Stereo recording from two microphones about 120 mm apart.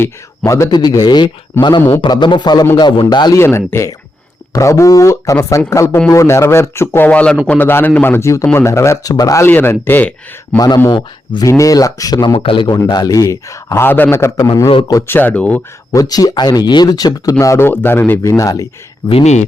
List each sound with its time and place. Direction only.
0.0 s speech: 25° left (ahead or behind)
0.7 s speech: 35° left (ahead or behind)
3.3 s a man's voice: 20° left (ahead or behind)
9.5 s speech: 15° left (ahead or behind)
10.8 s speech: 40° left (ahead or behind)
11.4 s a man's voice: 25° left (ahead or behind)
12.4 s a man's voice: 45° left (ahead or behind)
12.7 s a man's voice: 35° left (ahead or behind)
15.0 s speech: 15° left (ahead or behind)
15.9 s a man's voice: 30° left (ahead or behind)
18.2 s a man's voice: 30° left (ahead or behind)
19.2 s speech: 70° left (ahead or behind)